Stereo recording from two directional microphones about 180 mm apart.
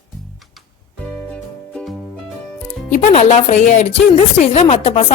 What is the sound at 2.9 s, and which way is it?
A woman's voice, 40° left (ahead or behind).